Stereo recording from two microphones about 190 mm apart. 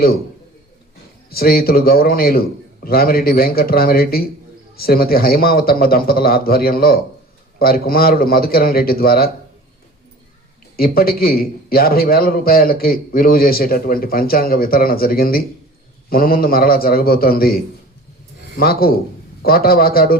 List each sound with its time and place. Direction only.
1.3 s a man's voice: 55° left (ahead or behind)
10.8 s a man's voice: 50° left (ahead or behind)